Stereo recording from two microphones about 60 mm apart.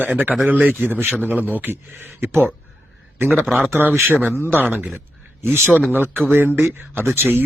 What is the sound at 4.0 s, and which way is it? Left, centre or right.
Speech, right.